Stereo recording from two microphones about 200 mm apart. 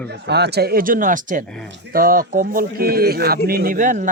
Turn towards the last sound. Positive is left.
turn(degrees=-40)  # may be behind; listen again after turning